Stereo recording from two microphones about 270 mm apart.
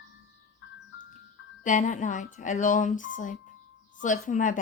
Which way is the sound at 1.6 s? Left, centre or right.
Left.